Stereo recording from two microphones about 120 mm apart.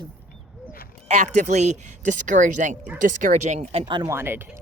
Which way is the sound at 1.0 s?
90° right.